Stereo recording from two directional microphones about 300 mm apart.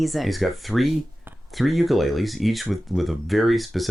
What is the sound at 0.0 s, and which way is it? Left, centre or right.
Speech, centre.